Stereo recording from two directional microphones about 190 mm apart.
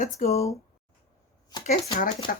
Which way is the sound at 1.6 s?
40° left (ahead or behind).